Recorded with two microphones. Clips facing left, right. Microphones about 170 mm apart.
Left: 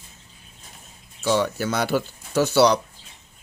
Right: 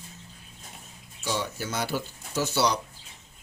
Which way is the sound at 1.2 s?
75° left (ahead or behind).